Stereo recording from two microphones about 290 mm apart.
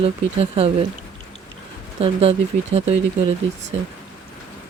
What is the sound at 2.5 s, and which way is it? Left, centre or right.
Speech, right.